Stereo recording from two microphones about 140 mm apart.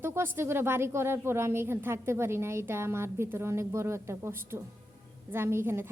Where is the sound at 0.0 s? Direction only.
15° right (ahead or behind).